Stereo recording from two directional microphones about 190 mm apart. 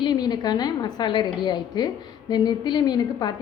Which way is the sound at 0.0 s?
20° left (ahead or behind).